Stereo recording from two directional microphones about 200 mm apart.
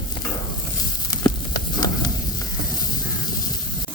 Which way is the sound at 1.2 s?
20° left (ahead or behind).